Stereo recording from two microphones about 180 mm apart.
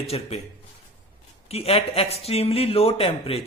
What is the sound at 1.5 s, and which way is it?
Speech, 35° left (ahead or behind).